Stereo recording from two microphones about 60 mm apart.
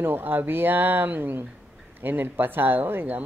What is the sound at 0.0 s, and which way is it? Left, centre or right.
Speech, right.